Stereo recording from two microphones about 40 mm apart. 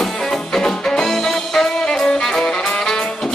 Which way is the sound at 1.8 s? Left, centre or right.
Left.